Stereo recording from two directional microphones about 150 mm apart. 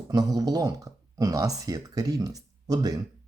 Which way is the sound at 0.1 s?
25° right (ahead or behind).